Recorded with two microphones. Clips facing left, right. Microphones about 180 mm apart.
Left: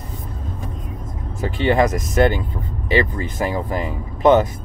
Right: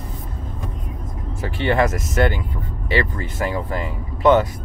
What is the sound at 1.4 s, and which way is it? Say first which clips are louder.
Speech: left 2 dB; 15° left (ahead or behind).